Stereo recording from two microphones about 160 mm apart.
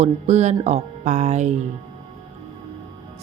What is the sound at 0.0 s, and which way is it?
Speech, 45° right (ahead or behind).